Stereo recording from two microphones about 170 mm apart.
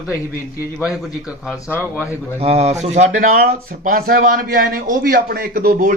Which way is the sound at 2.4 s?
40° right (ahead or behind).